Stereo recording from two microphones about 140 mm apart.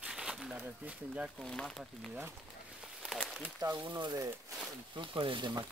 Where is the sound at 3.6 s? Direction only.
30° right (ahead or behind).